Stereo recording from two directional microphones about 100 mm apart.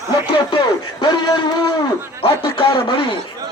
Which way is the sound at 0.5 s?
50° left (ahead or behind).